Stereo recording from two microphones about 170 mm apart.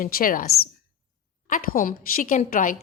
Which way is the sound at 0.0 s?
60° left (ahead or behind).